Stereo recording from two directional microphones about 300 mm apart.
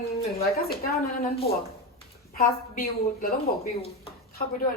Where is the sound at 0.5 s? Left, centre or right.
Left.